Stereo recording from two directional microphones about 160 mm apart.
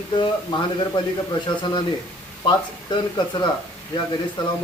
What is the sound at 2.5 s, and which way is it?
Speech, 30° left (ahead or behind).